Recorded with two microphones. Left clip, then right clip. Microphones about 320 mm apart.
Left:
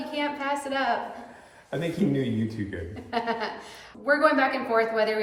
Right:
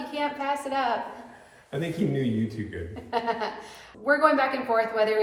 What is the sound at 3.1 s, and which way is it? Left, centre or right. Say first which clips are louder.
A woman's voice: right 1 dB; centre.